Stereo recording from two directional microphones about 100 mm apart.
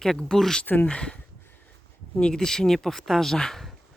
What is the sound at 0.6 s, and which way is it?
Speech, 15° left (ahead or behind).